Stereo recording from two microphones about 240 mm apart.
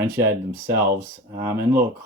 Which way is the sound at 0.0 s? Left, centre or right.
Centre.